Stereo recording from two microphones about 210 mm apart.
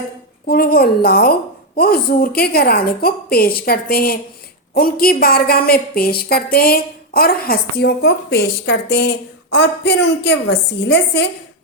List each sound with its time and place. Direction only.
0.4 s a woman's voice: 45° left (ahead or behind)